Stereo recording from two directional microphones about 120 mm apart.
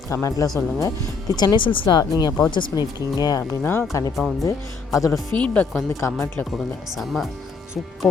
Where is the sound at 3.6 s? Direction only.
20° left (ahead or behind).